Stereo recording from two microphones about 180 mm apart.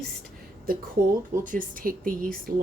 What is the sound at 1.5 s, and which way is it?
Speech, 50° right (ahead or behind).